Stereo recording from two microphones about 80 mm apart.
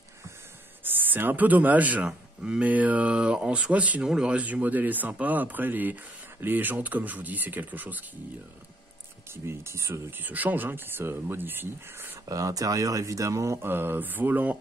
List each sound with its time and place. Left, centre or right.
0.8 s speech: right
9.3 s speech: right
10.1 s speech: right
12.3 s speech: right
13.7 s speech: right